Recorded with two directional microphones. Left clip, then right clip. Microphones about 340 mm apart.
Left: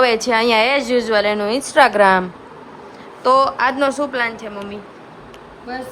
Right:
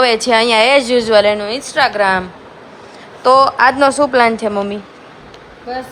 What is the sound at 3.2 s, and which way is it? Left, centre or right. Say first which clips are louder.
A woman's voice: right 5 dB; centre.